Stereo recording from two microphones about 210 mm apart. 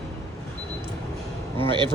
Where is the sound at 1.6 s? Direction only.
20° right (ahead or behind).